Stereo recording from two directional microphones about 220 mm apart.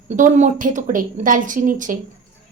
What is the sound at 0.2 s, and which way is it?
Speech, 35° right (ahead or behind).